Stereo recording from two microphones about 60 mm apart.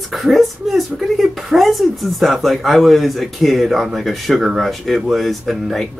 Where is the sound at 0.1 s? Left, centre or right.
Centre.